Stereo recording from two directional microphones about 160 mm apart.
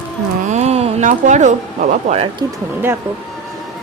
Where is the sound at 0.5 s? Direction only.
40° right (ahead or behind).